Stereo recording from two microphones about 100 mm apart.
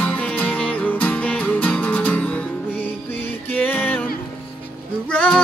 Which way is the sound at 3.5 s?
15° left (ahead or behind).